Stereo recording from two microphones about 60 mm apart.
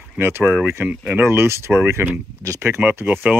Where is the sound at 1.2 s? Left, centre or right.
Right.